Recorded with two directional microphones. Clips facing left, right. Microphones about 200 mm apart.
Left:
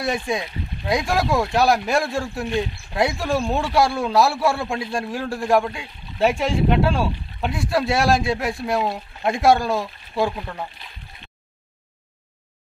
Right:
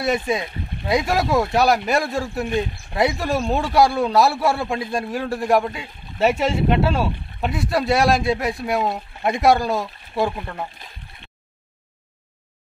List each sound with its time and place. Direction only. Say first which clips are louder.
0.3 s speech: right 2 dB; centre (ahead or behind)